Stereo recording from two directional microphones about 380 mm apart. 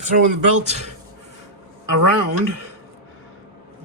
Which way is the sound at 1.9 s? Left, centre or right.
Right.